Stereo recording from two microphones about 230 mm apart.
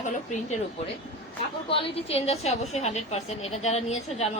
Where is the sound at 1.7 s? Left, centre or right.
Left.